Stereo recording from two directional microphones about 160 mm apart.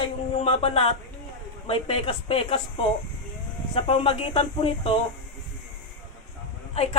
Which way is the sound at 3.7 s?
35° left (ahead or behind).